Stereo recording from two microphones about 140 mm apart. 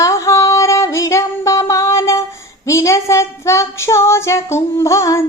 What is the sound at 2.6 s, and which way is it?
Child singing, 20° left (ahead or behind).